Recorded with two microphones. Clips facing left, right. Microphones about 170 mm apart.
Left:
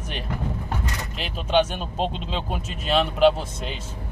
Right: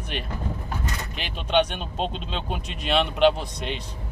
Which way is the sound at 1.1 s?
5° left (ahead or behind).